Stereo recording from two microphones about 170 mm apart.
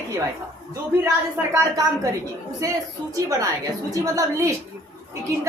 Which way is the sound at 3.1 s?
20° right (ahead or behind).